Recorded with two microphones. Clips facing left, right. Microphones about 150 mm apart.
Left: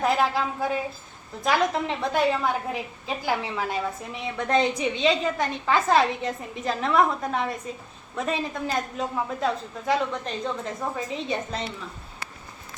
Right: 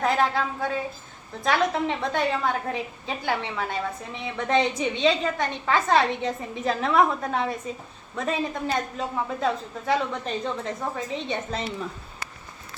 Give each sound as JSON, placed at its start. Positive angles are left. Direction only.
{"t": 0.0, "sound": "a woman's voice", "side_deg": 5}